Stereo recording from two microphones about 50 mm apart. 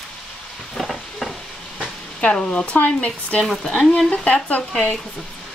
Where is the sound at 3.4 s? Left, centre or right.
Centre.